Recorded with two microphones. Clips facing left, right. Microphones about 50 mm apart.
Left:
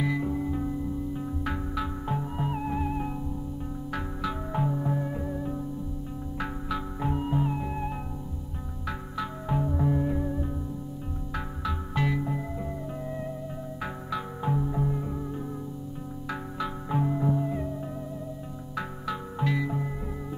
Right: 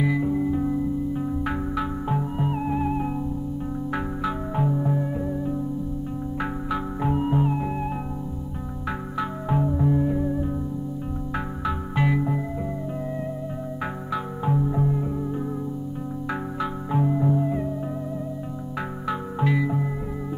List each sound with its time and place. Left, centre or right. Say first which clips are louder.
0.0 s music: right 5 dB; centre
4.6 s music: right 6 dB; centre
9.2 s music: right 5 dB; centre
11.3 s music: right 4 dB; centre
14.1 s music: right 4 dB; centre
16.5 s music: right 3 dB; centre
19.0 s music: right 6 dB; centre